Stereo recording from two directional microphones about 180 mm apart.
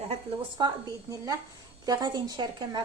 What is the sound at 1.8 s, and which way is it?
A woman's voice, 20° right (ahead or behind).